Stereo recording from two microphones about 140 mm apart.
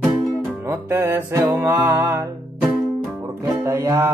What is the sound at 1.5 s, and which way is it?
Mantra, 25° right (ahead or behind).